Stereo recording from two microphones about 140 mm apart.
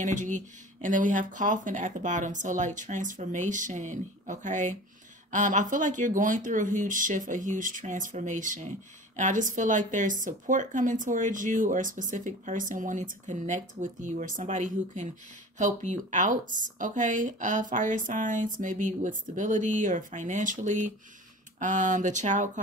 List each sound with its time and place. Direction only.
0.0 s speech: 65° right (ahead or behind)